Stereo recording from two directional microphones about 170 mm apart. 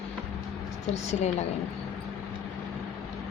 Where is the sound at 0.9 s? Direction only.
40° left (ahead or behind).